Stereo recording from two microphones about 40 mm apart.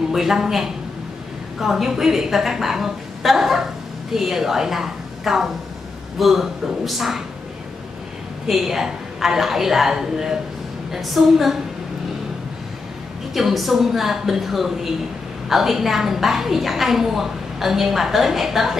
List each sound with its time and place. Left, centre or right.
0.1 s a woman's voice: centre
8.5 s a woman's voice: centre
13.3 s a woman's voice: centre